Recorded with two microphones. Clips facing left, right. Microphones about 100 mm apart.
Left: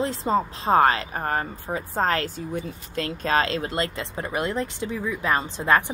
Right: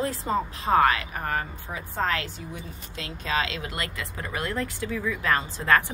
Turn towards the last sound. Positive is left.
turn(degrees=20)  # may be behind; listen again after turning